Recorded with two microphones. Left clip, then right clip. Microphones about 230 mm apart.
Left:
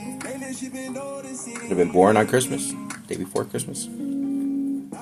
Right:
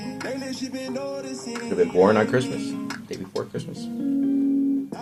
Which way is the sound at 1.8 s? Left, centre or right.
Left.